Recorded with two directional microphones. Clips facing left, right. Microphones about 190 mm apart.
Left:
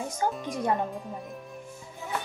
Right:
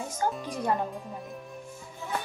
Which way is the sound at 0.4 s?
Centre (ahead or behind).